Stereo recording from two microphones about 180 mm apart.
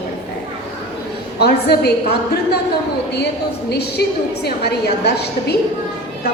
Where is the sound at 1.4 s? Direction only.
60° left (ahead or behind).